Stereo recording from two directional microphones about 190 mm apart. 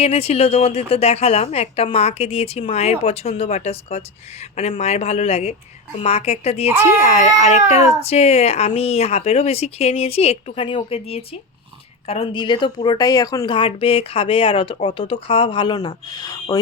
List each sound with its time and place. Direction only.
0.0 s speech: 30° left (ahead or behind)